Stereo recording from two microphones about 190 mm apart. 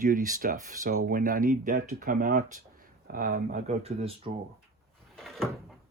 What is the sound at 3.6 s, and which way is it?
Speech, 35° right (ahead or behind).